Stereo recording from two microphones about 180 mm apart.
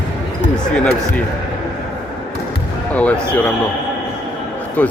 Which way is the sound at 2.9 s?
5° left (ahead or behind).